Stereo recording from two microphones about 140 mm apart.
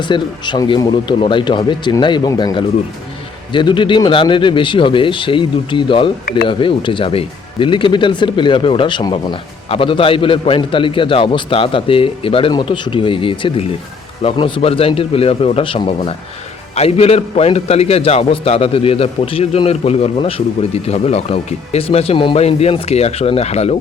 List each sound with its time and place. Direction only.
0.0 s a man's voice: 35° left (ahead or behind); by 23.7 s 50° left (ahead or behind)